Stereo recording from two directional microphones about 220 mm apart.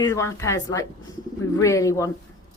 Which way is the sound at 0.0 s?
15° left (ahead or behind).